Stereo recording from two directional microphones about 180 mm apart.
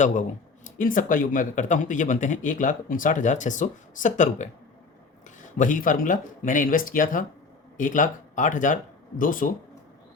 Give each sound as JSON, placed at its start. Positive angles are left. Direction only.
{"t": 0.0, "sound": "speech", "side_deg": 45}
{"t": 5.5, "sound": "speech", "side_deg": 45}